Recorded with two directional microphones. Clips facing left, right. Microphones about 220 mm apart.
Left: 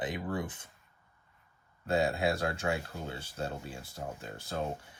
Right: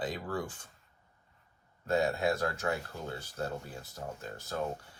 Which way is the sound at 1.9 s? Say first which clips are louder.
Even; 30° left (ahead or behind).